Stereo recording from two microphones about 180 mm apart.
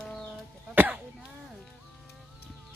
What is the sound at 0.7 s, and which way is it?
Speech, 10° right (ahead or behind).